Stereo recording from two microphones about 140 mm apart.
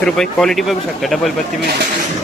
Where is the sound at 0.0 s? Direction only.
5° left (ahead or behind).